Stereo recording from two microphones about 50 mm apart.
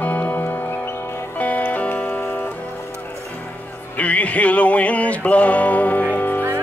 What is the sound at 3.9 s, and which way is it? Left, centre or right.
Music, left.